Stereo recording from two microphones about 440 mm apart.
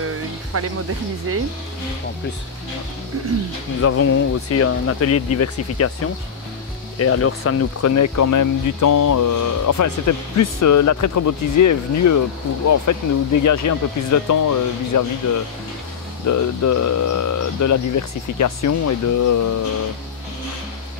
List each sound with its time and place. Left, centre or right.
0.0 s music: right
1.3 s speech: right
3.8 s speech: left
7.0 s speech: left
16.3 s speech: left